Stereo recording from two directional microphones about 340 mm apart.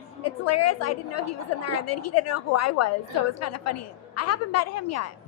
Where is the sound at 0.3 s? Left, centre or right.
Left.